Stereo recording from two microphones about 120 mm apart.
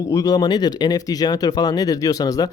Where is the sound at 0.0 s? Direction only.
30° left (ahead or behind).